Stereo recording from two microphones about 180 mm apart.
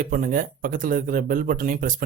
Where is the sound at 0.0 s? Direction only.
50° right (ahead or behind).